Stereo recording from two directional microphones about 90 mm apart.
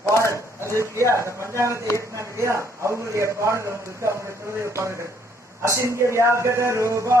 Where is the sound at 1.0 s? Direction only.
30° right (ahead or behind).